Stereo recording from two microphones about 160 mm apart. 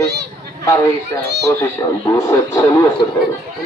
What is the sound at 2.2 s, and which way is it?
Speech, 20° left (ahead or behind).